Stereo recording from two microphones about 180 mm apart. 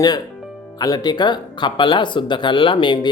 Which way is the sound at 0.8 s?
20° left (ahead or behind).